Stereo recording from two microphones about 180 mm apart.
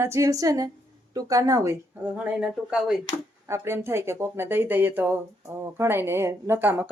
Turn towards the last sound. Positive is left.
turn(degrees=-10)  # may be behind; listen again after turning